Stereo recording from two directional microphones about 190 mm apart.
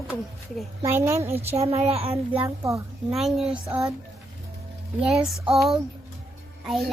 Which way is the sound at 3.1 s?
Centre (ahead or behind).